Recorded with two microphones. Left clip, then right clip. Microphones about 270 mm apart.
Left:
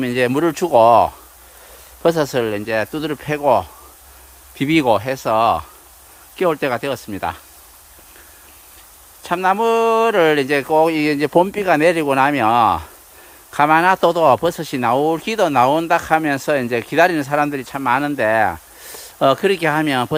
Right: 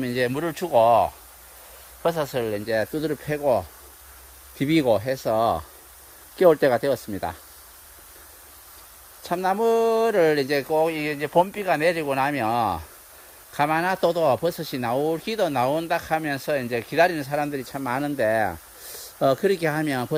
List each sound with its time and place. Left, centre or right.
0.0 s speech: centre
9.2 s speech: centre